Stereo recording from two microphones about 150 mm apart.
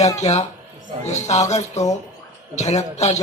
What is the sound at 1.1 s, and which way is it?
Speech, 50° left (ahead or behind).